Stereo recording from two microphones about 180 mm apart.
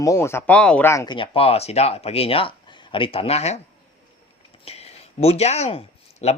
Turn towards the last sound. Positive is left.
turn(degrees=35)  # may be behind; listen again after turning